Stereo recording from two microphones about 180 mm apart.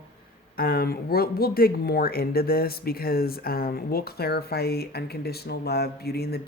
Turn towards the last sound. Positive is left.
turn(degrees=60)  # may be behind; listen again after turning